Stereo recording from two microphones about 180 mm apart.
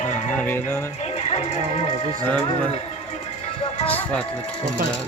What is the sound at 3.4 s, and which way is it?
Music, 35° left (ahead or behind).